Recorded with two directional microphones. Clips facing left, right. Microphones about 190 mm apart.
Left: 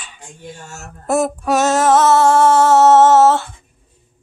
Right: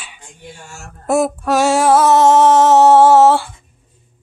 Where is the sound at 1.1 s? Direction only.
Centre (ahead or behind).